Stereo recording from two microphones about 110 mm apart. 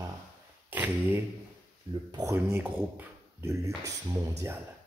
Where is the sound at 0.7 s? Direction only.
20° right (ahead or behind).